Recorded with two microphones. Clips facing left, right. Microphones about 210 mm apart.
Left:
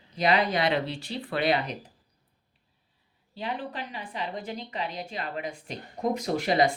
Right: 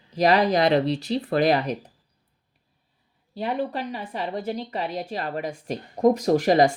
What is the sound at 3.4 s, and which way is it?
Speech, 45° right (ahead or behind).